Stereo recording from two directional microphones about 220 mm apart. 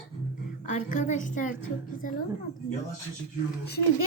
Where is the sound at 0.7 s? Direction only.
35° left (ahead or behind).